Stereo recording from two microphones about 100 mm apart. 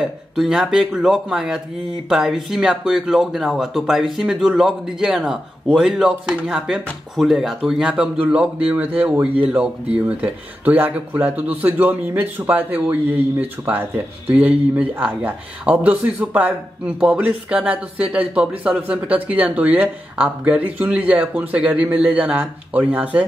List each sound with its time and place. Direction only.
0.0 s speech: 5° right (ahead or behind)